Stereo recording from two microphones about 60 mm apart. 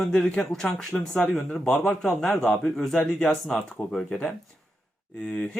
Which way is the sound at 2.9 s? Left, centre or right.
Centre.